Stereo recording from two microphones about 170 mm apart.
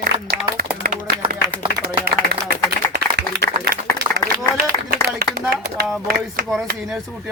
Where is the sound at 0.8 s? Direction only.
55° right (ahead or behind).